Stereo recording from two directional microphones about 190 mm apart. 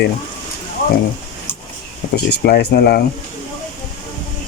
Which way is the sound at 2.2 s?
60° left (ahead or behind).